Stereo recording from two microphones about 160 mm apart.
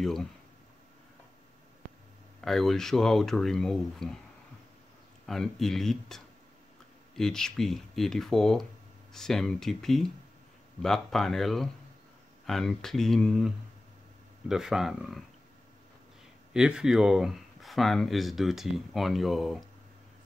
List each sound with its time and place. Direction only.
0.0 s speech: centre (ahead or behind)
2.4 s speech: centre (ahead or behind)
5.2 s speech: centre (ahead or behind)
14.5 s speech: centre (ahead or behind)
16.5 s speech: 5° right (ahead or behind)